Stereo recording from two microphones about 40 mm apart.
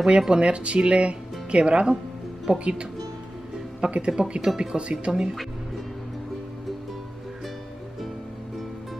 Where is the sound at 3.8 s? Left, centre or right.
Right.